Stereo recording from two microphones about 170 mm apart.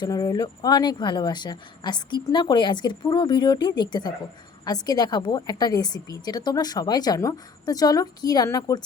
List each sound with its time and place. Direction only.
0.0 s a woman's voice: 25° left (ahead or behind)